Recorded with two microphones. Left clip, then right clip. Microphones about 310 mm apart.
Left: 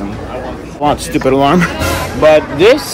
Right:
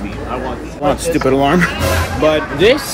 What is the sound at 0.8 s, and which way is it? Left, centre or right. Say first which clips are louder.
Speech: left 2 dB; centre.